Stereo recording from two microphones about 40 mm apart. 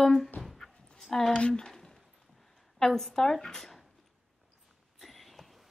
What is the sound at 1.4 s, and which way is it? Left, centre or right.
Speech, left.